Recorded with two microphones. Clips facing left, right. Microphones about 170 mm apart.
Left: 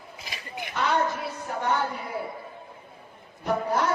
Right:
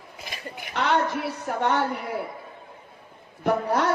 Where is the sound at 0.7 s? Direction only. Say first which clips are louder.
Right 2 dB; 70° right (ahead or behind).